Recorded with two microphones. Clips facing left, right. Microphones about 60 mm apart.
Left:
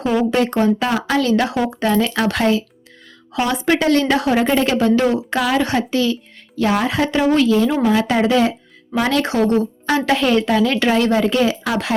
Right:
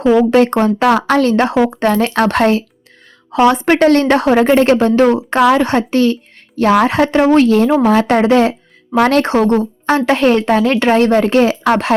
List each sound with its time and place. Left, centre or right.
0.3 s speech: right